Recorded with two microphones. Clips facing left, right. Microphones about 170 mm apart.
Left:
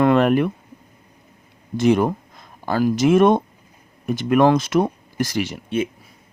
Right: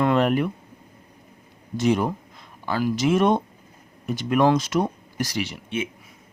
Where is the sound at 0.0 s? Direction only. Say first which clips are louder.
Left 4 dB; 60° left (ahead or behind).